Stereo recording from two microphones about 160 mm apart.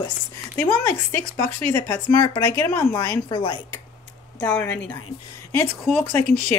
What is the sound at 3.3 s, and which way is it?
Speech, 30° left (ahead or behind).